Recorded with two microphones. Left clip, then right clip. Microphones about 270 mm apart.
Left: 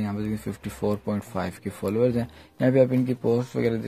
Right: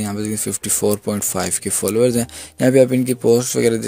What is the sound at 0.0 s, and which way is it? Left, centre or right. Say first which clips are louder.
Speech: right 7 dB; right.